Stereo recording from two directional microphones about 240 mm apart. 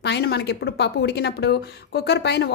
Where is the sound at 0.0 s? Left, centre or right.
Left.